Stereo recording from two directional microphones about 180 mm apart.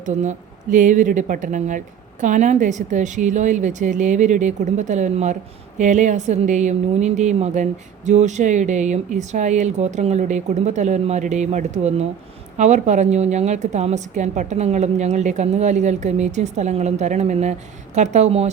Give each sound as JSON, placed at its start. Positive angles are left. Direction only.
{"t": 0.0, "sound": "a woman's voice", "side_deg": -45}